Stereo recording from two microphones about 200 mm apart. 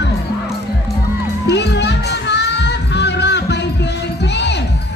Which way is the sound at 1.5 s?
60° left (ahead or behind).